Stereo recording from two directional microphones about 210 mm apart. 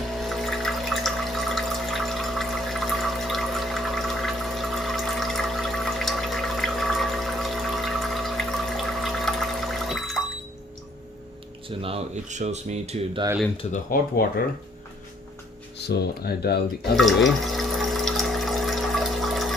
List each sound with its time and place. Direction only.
0.1 s music: centre (ahead or behind)
11.8 s speech: 25° right (ahead or behind)
13.6 s speech: 30° left (ahead or behind)
15.8 s speech: 50° left (ahead or behind)
16.9 s water: centre (ahead or behind)